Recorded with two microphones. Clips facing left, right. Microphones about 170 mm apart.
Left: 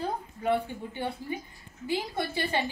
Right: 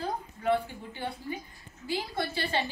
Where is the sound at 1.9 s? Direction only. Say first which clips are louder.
Left 2 dB; 20° left (ahead or behind).